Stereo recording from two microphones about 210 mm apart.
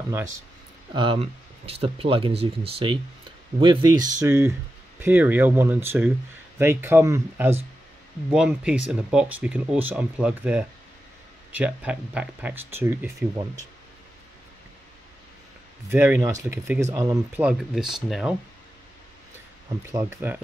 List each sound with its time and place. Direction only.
0.9 s speech: 25° right (ahead or behind)
15.9 s speech: 10° right (ahead or behind)
19.8 s speech: 10° right (ahead or behind)